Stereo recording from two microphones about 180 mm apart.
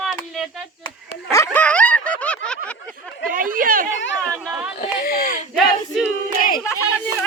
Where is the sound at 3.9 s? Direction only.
90° left.